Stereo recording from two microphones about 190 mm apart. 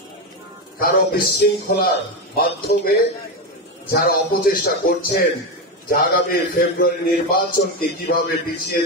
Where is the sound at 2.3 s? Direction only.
55° left (ahead or behind).